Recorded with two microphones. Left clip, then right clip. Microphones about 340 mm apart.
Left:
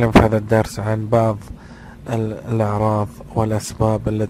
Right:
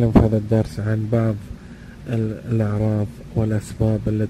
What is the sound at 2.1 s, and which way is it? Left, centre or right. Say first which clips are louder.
Speech: left 4 dB; left.